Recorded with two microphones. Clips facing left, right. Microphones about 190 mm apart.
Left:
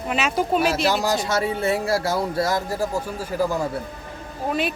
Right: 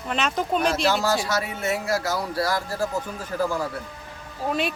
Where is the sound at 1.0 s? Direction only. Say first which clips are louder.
Left 2 dB; 20° left (ahead or behind).